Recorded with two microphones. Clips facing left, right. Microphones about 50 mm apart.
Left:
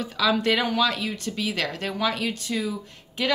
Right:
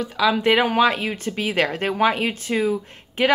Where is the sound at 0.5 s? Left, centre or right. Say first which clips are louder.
Right 5 dB; right.